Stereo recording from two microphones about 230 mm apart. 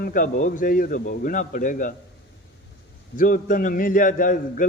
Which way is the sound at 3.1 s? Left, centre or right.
Left.